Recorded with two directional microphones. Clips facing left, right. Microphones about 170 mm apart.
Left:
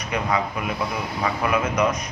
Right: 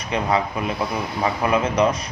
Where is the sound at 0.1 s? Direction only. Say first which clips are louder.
Right 3 dB; 30° right (ahead or behind).